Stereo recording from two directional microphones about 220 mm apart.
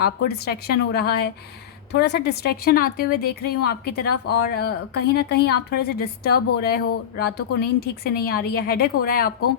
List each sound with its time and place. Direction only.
0.0 s a woman's voice: 45° left (ahead or behind)